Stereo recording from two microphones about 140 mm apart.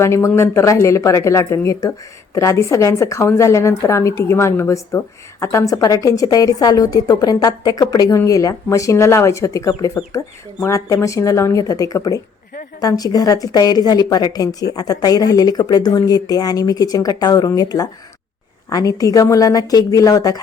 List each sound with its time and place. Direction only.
0.0 s a woman's voice: 20° left (ahead or behind)